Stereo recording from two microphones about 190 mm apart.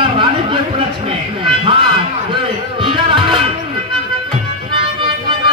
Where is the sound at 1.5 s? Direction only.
25° right (ahead or behind).